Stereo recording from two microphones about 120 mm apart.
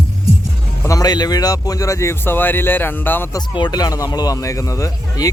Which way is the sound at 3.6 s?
35° left (ahead or behind).